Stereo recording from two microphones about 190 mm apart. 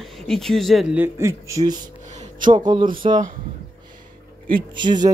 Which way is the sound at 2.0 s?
40° right (ahead or behind).